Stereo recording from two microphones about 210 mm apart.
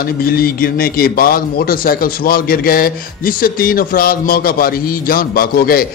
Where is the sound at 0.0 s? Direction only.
45° left (ahead or behind).